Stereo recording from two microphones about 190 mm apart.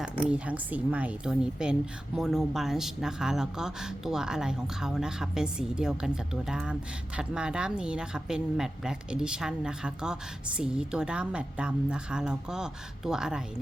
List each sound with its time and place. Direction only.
0.0 s a woman's voice: 5° right (ahead or behind)